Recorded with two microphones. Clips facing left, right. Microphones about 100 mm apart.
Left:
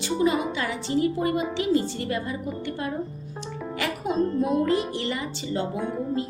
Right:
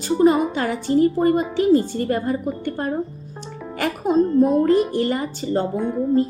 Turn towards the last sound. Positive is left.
turn(degrees=0)  # may be behind; listen again after turning